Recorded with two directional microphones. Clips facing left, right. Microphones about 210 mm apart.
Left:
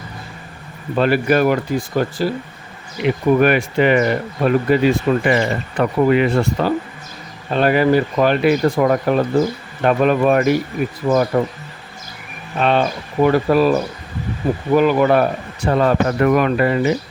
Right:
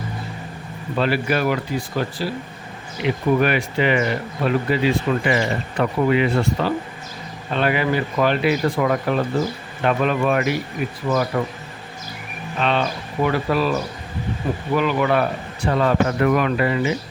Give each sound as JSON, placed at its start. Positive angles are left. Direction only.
{"t": 0.9, "sound": "speech", "side_deg": 50}
{"t": 11.1, "sound": "speech", "side_deg": 30}
{"t": 12.5, "sound": "speech", "side_deg": 45}
{"t": 14.8, "sound": "speech", "side_deg": 45}